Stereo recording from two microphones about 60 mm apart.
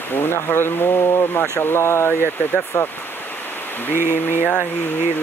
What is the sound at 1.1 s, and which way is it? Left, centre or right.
Speech, left.